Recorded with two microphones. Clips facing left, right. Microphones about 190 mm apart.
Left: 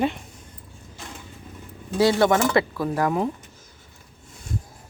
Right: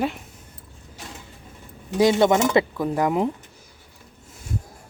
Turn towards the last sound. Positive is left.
turn(degrees=-20)  # may be behind; listen again after turning